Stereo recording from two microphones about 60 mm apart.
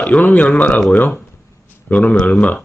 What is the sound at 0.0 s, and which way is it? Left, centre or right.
Speech, left.